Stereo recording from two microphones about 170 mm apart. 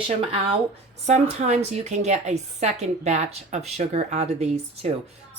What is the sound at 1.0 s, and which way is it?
A woman's voice, 45° right (ahead or behind).